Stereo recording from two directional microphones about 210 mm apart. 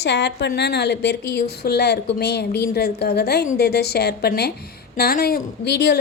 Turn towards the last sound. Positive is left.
turn(degrees=50)  # may be behind; listen again after turning